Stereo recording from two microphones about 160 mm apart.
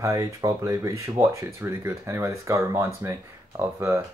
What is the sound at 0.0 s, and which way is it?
Speech, 20° right (ahead or behind).